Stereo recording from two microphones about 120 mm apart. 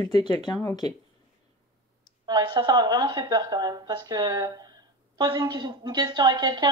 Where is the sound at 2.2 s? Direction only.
35° right (ahead or behind).